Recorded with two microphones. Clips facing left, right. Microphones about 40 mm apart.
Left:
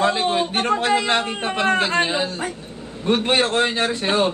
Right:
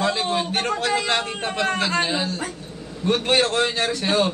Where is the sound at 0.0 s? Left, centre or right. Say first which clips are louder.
Left 3 dB; left.